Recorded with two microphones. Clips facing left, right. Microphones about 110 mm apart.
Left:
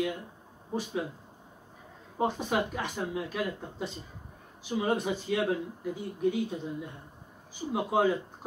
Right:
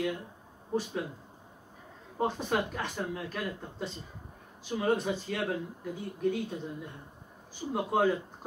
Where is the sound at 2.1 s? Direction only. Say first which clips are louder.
Left 1 dB; 5° left (ahead or behind).